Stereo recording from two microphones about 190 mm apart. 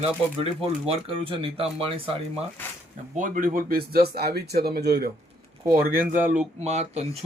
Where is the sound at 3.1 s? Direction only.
40° right (ahead or behind); by 5.1 s 60° right (ahead or behind).